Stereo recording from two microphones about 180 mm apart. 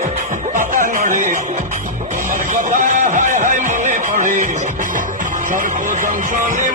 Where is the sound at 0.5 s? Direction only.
45° right (ahead or behind).